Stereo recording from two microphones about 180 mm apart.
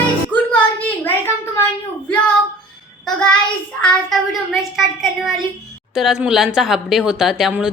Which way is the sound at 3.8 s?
5° left (ahead or behind).